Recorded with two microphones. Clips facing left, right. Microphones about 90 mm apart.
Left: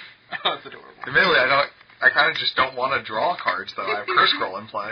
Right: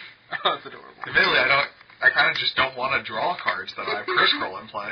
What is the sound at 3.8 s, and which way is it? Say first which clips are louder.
Speech: left 2 dB; 20° right (ahead or behind).